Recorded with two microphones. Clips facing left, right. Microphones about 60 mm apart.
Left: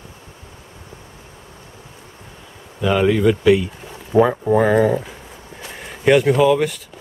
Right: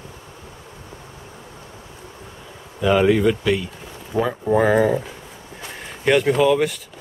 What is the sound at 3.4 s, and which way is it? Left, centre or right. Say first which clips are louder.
Speech: left 7 dB; centre.